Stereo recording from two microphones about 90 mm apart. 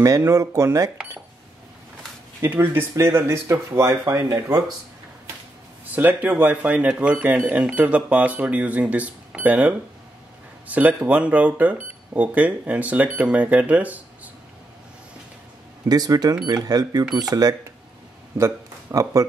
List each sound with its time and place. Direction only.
0.0 s speech: 35° right (ahead or behind)
2.4 s speech: 25° right (ahead or behind)
5.9 s speech: 20° right (ahead or behind)
15.9 s speech: 45° right (ahead or behind)